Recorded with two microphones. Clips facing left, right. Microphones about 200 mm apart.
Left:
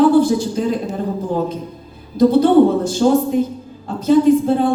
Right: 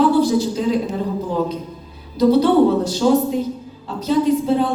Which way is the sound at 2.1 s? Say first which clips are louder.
Left 2 dB; 50° left (ahead or behind).